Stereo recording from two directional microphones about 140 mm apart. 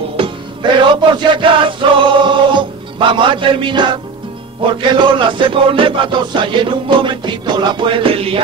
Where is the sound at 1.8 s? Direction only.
35° right (ahead or behind).